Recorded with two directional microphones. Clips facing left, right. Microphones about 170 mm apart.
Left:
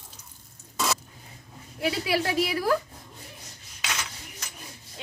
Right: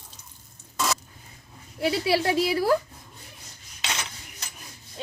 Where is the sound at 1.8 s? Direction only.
30° right (ahead or behind).